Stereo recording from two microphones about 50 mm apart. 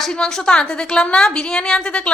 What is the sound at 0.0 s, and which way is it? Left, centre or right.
A woman's voice, centre.